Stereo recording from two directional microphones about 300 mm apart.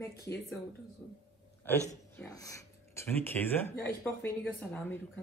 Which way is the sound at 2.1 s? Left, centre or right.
Centre.